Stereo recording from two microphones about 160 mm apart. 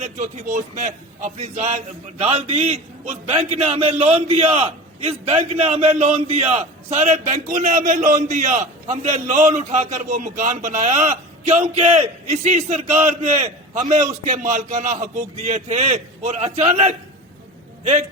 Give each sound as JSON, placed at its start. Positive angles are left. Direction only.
{"t": 0.0, "sound": "a man's voice", "side_deg": -45}